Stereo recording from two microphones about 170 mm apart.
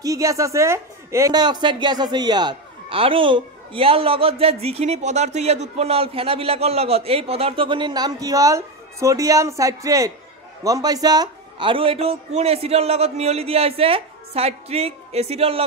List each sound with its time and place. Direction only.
0.0 s a man's voice: 20° right (ahead or behind); by 15.6 s 35° right (ahead or behind)